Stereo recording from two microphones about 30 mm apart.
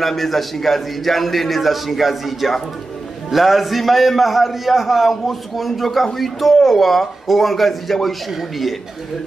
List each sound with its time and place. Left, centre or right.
0.0 s a man's voice: centre